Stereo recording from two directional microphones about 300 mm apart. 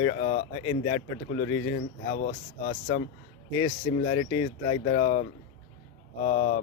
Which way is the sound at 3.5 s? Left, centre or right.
Centre.